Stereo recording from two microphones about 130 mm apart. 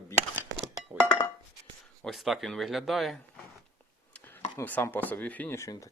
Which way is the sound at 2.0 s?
Centre (ahead or behind).